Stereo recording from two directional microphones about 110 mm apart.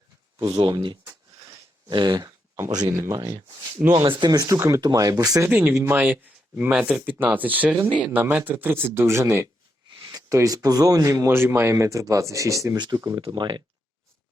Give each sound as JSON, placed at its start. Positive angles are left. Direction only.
{"t": 1.9, "sound": "speech", "side_deg": -40}
{"t": 3.8, "sound": "speech", "side_deg": -20}
{"t": 4.2, "sound": "speech", "side_deg": -35}
{"t": 5.5, "sound": "speech", "side_deg": -15}
{"t": 13.1, "sound": "speech", "side_deg": -40}